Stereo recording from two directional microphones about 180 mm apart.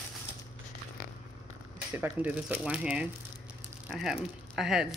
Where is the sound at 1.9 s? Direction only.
10° right (ahead or behind).